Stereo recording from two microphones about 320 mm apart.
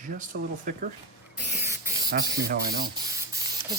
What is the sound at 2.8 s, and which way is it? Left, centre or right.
Spray, centre.